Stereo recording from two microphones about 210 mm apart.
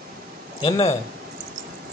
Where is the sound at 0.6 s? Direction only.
25° left (ahead or behind).